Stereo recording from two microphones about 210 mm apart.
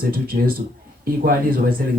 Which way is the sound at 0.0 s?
45° right (ahead or behind).